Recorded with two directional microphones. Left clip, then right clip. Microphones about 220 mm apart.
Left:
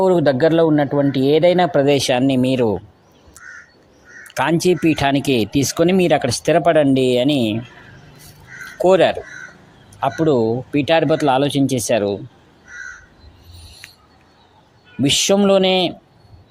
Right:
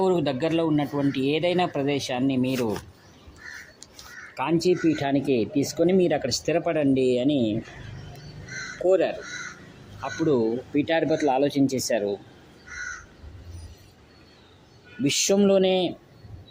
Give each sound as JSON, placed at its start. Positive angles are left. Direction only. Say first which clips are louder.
{"t": 0.0, "sound": "speech", "louder": "left 9 dB", "side_deg": 35}
{"t": 4.4, "sound": "speech", "louder": "left 7 dB", "side_deg": 45}
{"t": 8.9, "sound": "speech", "louder": "left 8 dB", "side_deg": 40}
{"t": 15.0, "sound": "speech", "louder": "left 7 dB", "side_deg": 35}